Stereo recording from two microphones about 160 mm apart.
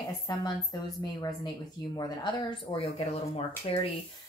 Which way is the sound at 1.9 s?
25° left (ahead or behind).